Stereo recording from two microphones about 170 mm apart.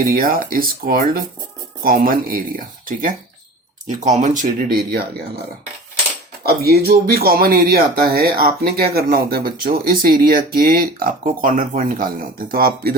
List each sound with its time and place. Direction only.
0.0 s speech: 55° right (ahead or behind)
6.7 s speech: 65° right (ahead or behind)
12.5 s speech: 60° right (ahead or behind)